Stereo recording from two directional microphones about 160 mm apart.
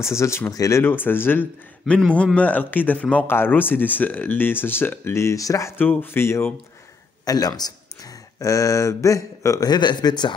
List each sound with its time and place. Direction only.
0.0 s speech: 15° left (ahead or behind)